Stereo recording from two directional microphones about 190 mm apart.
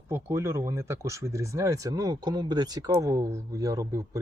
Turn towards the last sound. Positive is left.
turn(degrees=-15)  # may be behind; listen again after turning